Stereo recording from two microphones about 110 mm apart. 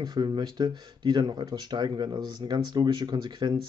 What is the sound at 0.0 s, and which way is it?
Speech, 40° right (ahead or behind).